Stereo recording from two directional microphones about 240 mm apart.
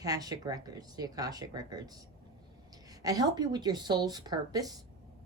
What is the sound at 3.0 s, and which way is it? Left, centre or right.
A woman's voice, centre.